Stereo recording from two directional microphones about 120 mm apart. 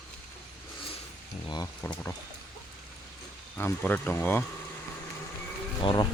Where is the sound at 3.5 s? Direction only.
15° left (ahead or behind).